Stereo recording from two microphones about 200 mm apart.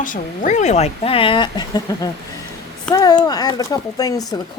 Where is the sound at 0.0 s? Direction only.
40° left (ahead or behind).